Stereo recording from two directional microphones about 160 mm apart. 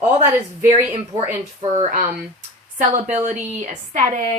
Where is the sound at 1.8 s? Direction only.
50° right (ahead or behind).